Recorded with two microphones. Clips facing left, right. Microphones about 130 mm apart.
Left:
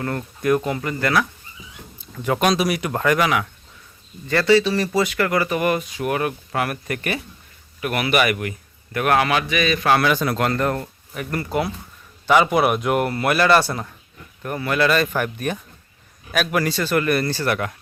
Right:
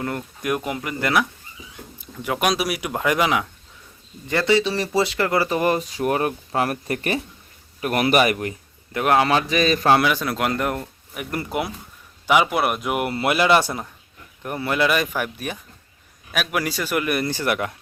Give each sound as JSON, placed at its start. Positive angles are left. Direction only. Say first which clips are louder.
{"t": 0.0, "sound": "speech", "louder": "left 3 dB", "side_deg": -10}
{"t": 2.1, "sound": "a man's voice", "louder": "left 3 dB", "side_deg": -5}
{"t": 10.0, "sound": "speech", "louder": "left 2 dB", "side_deg": -5}
{"t": 13.1, "sound": "speech", "louder": "right 1 dB", "side_deg": -20}